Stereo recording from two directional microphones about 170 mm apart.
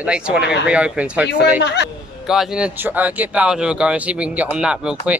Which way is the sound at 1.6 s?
80° left.